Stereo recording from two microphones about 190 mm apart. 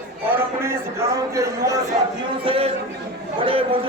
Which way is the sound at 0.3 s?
10° right (ahead or behind).